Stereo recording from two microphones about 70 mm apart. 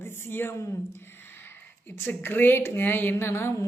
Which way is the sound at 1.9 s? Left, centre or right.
Left.